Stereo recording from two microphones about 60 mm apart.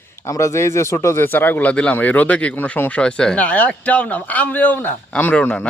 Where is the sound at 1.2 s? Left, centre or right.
Left.